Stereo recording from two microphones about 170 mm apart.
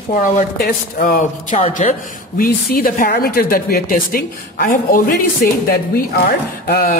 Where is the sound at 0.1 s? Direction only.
60° left (ahead or behind).